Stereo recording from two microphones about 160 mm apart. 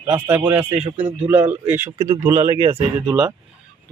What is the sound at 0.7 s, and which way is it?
Speech, 40° right (ahead or behind).